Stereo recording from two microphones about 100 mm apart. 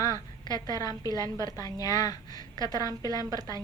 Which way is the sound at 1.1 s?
35° right (ahead or behind).